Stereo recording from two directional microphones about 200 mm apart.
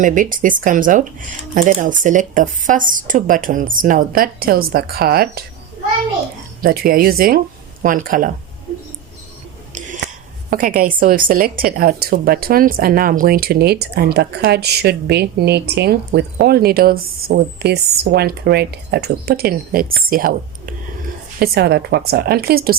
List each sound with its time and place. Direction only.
0.0 s a woman's voice: 40° right (ahead or behind)
6.6 s speech: 45° right (ahead or behind)
10.0 s a sound: 55° right (ahead or behind)
10.5 s a woman's voice: 45° right (ahead or behind)